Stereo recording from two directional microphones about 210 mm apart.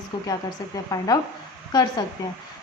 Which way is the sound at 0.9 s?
15° left (ahead or behind).